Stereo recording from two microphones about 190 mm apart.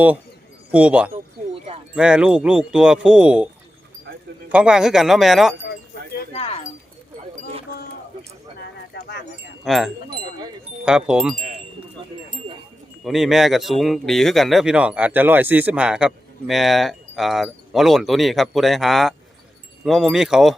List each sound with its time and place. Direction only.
0.7 s speech: 5° right (ahead or behind)
4.5 s speech: 5° right (ahead or behind)
6.3 s speech: 30° left (ahead or behind)
9.6 s speech: centre (ahead or behind)
12.0 s wind chime: 25° right (ahead or behind)
13.1 s speech: centre (ahead or behind)